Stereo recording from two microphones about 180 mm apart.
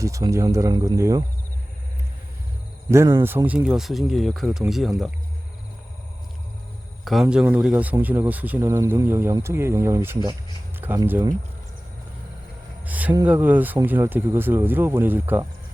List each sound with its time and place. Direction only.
0.0 s speech: 15° right (ahead or behind)
2.9 s speech: 15° right (ahead or behind)
7.0 s speech: centre (ahead or behind)
12.8 s a sound: 10° right (ahead or behind)
13.2 s speech: 10° right (ahead or behind)